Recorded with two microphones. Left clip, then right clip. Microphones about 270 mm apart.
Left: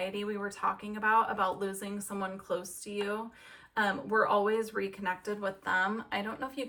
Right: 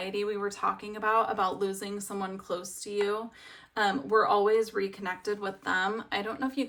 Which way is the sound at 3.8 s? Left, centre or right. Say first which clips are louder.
Right 4 dB; centre.